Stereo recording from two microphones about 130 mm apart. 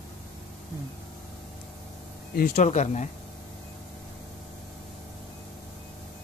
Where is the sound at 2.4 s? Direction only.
65° left (ahead or behind).